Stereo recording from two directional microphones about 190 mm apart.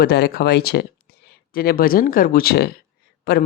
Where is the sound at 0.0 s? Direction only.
55° left (ahead or behind).